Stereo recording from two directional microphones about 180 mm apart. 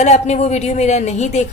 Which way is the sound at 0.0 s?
40° left (ahead or behind).